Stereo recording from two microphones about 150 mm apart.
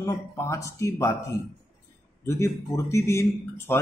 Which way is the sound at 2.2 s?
20° left (ahead or behind).